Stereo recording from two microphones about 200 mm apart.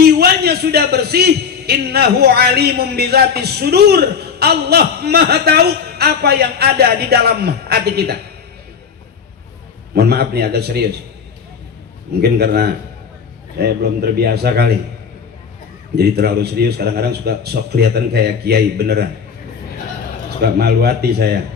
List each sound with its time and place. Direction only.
0.0 s a man's voice: 55° right (ahead or behind)
9.9 s a man's voice: 55° right (ahead or behind)
12.2 s a man's voice: 55° right (ahead or behind)
16.0 s a man's voice: 55° right (ahead or behind)
20.4 s a man's voice: 55° right (ahead or behind)